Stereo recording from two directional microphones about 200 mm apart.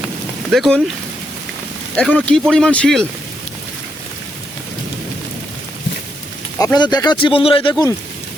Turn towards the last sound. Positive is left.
turn(degrees=20)  # may be behind; listen again after turning